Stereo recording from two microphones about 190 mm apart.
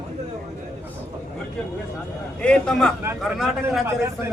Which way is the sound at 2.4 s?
5° left (ahead or behind).